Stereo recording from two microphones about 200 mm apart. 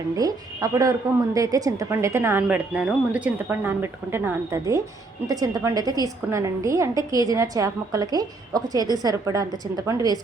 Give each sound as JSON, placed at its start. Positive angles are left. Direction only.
{"t": 0.2, "sound": "a woman's voice", "side_deg": -20}